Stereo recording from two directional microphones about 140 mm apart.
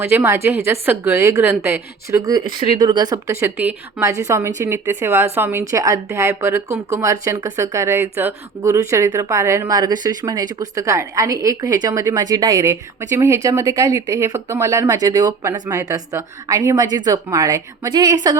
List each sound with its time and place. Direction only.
0.0 s a woman's voice: 15° right (ahead or behind)
3.4 s a woman's voice: 10° right (ahead or behind); by 18.3 s 25° right (ahead or behind)